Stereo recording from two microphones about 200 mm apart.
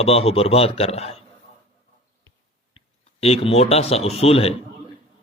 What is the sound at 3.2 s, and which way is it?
Speech, 30° left (ahead or behind).